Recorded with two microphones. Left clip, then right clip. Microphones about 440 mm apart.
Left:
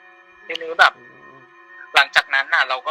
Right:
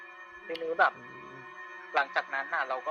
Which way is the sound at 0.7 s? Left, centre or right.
Left.